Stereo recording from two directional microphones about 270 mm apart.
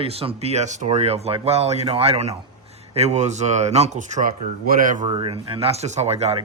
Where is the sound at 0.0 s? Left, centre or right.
Right.